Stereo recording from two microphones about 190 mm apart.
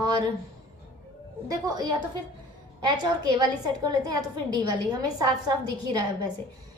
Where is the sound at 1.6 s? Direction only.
20° right (ahead or behind).